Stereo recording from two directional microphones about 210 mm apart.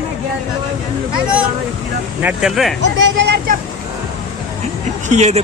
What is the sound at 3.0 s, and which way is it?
Speech, 55° right (ahead or behind).